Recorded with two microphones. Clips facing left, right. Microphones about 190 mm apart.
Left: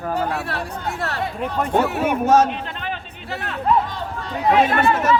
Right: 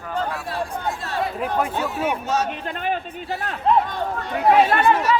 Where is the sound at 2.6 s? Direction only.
45° right (ahead or behind).